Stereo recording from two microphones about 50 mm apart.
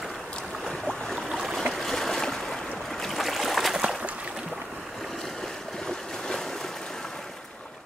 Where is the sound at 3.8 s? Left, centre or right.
Centre.